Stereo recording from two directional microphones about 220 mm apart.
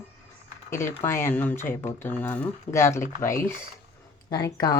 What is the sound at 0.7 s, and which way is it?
Speech, 10° left (ahead or behind).